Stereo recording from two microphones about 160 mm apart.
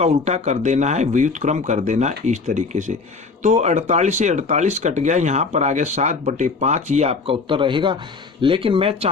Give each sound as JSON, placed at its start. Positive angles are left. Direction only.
{"t": 0.0, "sound": "speech", "side_deg": -45}